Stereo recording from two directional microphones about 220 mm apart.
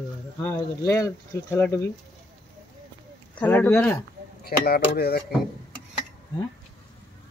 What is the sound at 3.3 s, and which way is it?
Speech, 5° left (ahead or behind).